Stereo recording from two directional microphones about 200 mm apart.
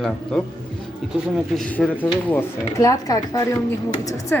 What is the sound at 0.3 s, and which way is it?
Speech, 5° left (ahead or behind).